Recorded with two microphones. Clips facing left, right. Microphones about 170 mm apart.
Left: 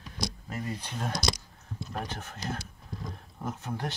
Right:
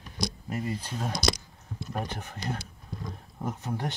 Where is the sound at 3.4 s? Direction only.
10° right (ahead or behind).